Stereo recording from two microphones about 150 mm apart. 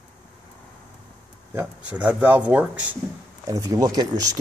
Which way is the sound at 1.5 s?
10° right (ahead or behind).